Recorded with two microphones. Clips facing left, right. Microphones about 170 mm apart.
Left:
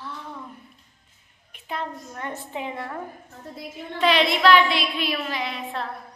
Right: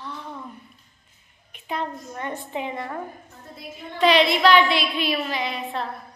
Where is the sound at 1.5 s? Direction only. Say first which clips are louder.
Right 2 dB; centre (ahead or behind).